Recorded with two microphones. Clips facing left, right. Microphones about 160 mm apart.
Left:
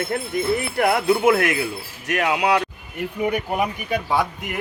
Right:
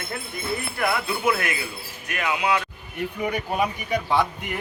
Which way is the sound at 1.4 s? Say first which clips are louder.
Left 8 dB; 75° left (ahead or behind).